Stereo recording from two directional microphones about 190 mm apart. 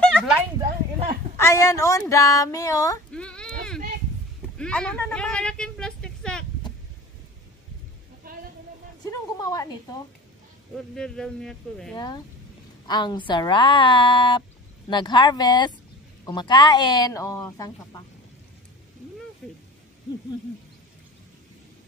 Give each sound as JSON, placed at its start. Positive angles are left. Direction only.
{"t": 0.0, "sound": "a sound", "side_deg": 0}
{"t": 1.4, "sound": "speech", "side_deg": 15}
{"t": 3.1, "sound": "baby cry", "side_deg": 5}
{"t": 4.6, "sound": "speech", "side_deg": 5}
{"t": 8.3, "sound": "a sound", "side_deg": -45}
{"t": 9.4, "sound": "a woman's voice", "side_deg": 20}
{"t": 11.0, "sound": "speech", "side_deg": 5}
{"t": 12.8, "sound": "speech", "side_deg": 20}
{"t": 19.4, "sound": "speech", "side_deg": 0}